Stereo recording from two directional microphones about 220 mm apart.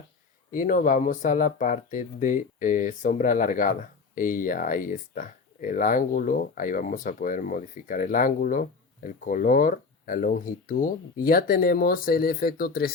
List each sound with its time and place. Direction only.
0.5 s speech: 35° left (ahead or behind)